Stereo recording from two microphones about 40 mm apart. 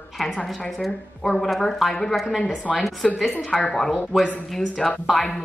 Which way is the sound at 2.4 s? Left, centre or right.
Left.